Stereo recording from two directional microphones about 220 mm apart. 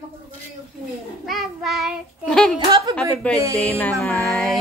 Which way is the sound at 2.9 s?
5° left (ahead or behind).